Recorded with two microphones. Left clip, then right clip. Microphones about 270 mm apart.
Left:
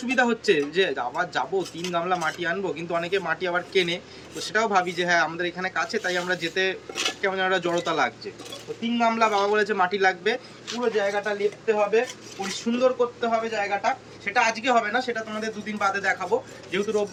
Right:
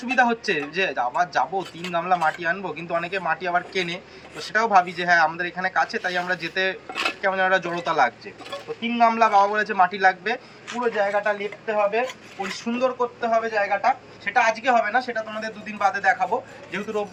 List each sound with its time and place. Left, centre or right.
0.2 s speech: centre
6.9 s speech: centre
7.2 s speech: centre